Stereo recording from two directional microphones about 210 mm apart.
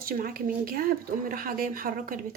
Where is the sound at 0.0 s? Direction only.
45° right (ahead or behind).